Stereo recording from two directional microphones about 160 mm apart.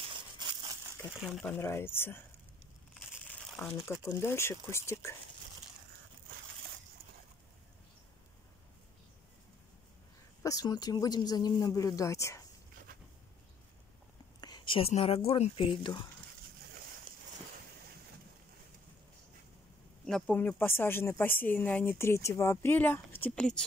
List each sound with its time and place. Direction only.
0.1 s a sound: 30° right (ahead or behind)
1.4 s speech: 10° left (ahead or behind)
3.5 s speech: 5° left (ahead or behind)
4.1 s speech: 15° left (ahead or behind)
10.4 s speech: 20° left (ahead or behind)
14.4 s speech: 30° left (ahead or behind)
20.1 s speech: 10° left (ahead or behind)